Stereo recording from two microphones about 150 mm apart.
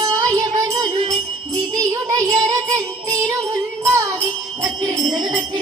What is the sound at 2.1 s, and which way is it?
Music, 20° right (ahead or behind).